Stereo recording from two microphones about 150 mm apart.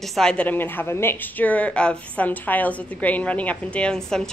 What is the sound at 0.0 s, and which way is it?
Speech, 5° left (ahead or behind).